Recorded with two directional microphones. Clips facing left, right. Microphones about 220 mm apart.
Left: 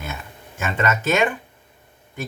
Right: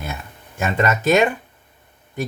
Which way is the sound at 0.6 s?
35° right (ahead or behind).